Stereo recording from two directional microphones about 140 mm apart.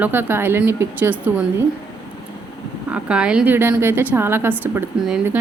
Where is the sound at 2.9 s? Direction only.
5° right (ahead or behind).